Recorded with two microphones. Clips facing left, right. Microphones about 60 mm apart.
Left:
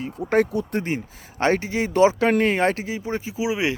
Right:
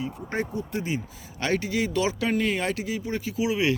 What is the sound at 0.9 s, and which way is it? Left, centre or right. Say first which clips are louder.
Speech: left 4 dB; left.